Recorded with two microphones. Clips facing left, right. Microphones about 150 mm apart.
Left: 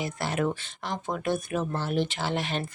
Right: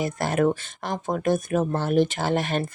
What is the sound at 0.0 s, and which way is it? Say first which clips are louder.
Speech: right 6 dB; 50° right (ahead or behind).